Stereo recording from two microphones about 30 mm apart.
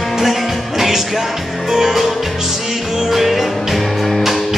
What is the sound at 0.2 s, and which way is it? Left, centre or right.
Music, centre.